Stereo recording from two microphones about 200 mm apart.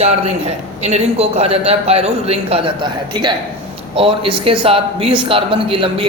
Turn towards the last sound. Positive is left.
turn(degrees=-25)  # may be behind; listen again after turning